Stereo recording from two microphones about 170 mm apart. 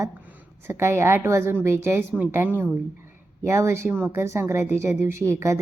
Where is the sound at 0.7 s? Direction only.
15° right (ahead or behind).